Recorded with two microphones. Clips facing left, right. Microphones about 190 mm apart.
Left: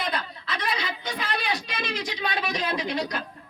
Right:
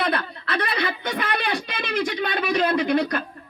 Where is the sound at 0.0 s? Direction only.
60° right (ahead or behind).